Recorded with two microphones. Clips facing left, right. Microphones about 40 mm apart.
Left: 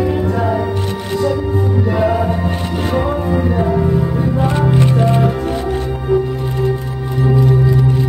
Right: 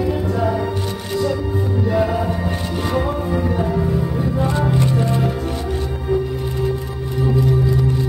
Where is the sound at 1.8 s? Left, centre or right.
Centre; by 5.2 s left.